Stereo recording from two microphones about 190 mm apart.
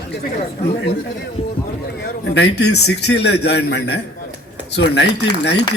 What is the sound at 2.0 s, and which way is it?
A man's voice, 60° left (ahead or behind).